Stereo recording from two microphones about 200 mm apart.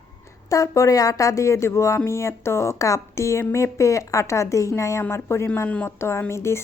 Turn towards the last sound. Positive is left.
turn(degrees=15)  # may be behind; listen again after turning